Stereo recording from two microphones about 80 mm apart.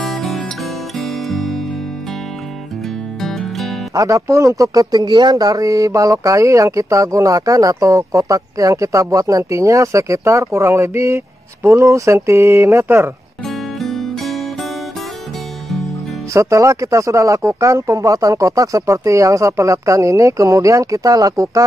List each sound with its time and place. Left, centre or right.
0.0 s music: centre
3.2 s music: centre
3.9 s speech: right
13.5 s music: centre
16.3 s speech: right